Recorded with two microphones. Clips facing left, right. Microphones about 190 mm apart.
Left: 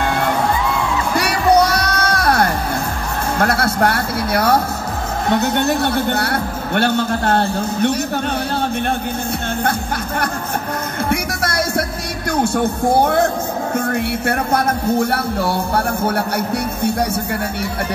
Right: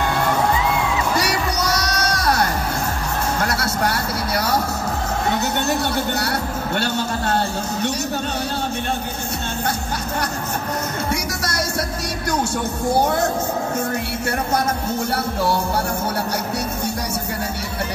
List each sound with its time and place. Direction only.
1.1 s music: 55° left (ahead or behind)
11.1 s music: 55° left (ahead or behind)
12.9 s music: 55° left (ahead or behind)